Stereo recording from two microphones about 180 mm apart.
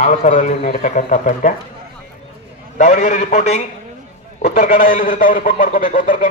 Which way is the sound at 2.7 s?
45° left (ahead or behind).